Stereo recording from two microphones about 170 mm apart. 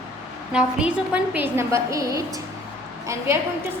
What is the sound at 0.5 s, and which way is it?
A woman's voice, 5° right (ahead or behind).